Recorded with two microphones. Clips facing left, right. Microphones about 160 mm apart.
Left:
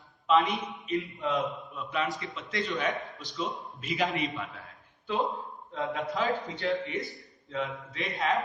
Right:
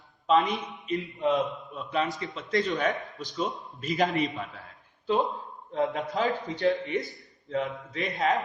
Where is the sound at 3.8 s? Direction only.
40° right (ahead or behind).